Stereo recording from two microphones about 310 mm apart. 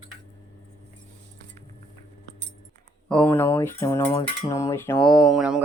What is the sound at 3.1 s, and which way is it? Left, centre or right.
Cutlery, centre.